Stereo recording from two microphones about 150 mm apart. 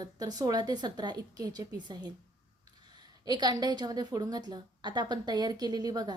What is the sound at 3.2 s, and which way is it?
A woman's voice, 30° right (ahead or behind).